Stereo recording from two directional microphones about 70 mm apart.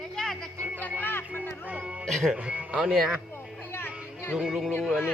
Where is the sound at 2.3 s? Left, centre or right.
Centre.